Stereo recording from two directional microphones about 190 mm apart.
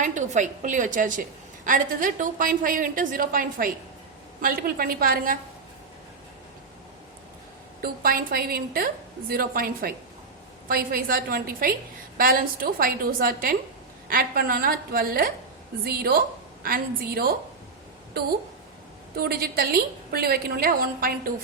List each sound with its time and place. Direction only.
0.0 s a woman's voice: 40° right (ahead or behind)
7.8 s a woman's voice: 50° right (ahead or behind)
19.1 s a woman's voice: 55° right (ahead or behind)